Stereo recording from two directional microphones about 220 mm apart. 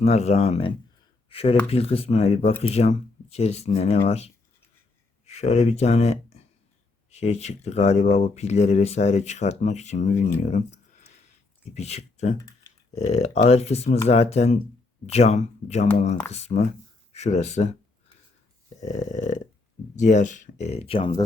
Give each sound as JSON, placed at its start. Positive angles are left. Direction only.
{"t": 0.0, "sound": "speech", "side_deg": 30}
{"t": 10.5, "sound": "a sound", "side_deg": 30}
{"t": 11.7, "sound": "speech", "side_deg": 30}
{"t": 18.9, "sound": "speech", "side_deg": 35}